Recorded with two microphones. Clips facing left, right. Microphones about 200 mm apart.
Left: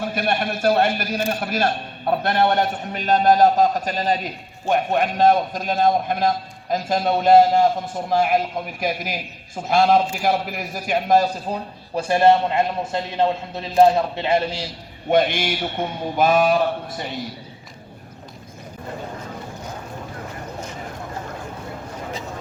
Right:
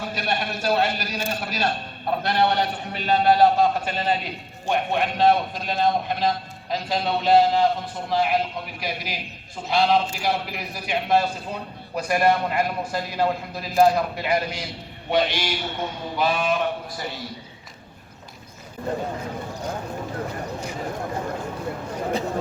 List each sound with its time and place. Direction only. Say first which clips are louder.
0.0 s a man's voice: left 4 dB; 55° left (ahead or behind)
11.9 s a man's voice: left 5 dB; 30° left (ahead or behind)
15.1 s a man's voice: left 4 dB; 50° left (ahead or behind)